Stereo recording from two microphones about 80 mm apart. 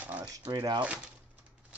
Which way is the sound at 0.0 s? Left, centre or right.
Right.